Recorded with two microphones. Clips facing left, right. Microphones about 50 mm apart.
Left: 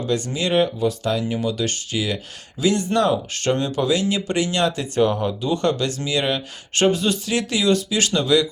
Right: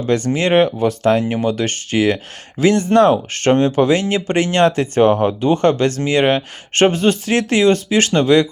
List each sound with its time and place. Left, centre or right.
0.0 s speech: right